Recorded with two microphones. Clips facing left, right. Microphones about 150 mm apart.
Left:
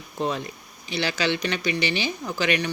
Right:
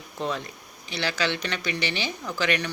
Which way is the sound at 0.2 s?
15° left (ahead or behind).